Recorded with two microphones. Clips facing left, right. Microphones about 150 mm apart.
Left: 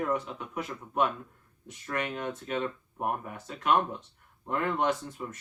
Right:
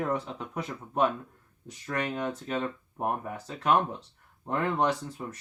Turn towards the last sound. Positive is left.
turn(degrees=-35)  # may be behind; listen again after turning